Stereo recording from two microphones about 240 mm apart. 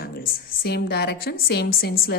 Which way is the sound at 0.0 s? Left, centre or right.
Left.